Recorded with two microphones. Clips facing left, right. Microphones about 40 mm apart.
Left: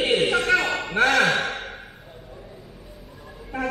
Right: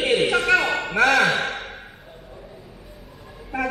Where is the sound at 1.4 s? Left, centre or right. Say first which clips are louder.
Even; centre.